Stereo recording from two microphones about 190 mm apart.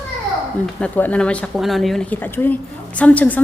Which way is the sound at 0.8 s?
10° left (ahead or behind).